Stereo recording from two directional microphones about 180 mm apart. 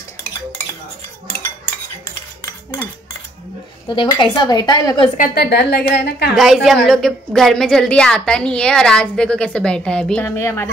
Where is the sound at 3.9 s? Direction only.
25° left (ahead or behind).